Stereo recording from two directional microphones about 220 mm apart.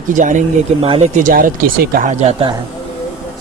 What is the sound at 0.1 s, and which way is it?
Speech, 35° right (ahead or behind).